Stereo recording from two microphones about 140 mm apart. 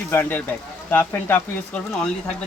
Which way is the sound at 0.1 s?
15° left (ahead or behind).